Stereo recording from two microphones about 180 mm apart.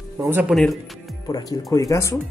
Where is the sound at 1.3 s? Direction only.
20° left (ahead or behind).